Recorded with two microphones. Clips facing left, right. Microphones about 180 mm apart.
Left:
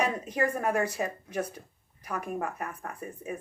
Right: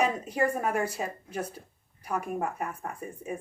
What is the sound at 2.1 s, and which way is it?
Speech, 10° right (ahead or behind).